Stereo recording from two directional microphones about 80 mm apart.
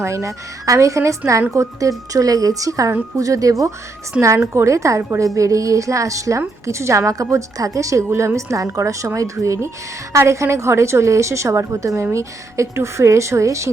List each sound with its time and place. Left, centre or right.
0.0 s a woman's voice: right